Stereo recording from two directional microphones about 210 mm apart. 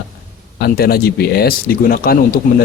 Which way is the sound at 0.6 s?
50° left (ahead or behind).